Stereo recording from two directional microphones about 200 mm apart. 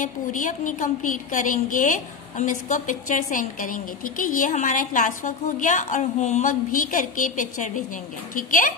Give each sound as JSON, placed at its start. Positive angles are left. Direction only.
{"t": 0.0, "sound": "a woman's voice", "side_deg": 40}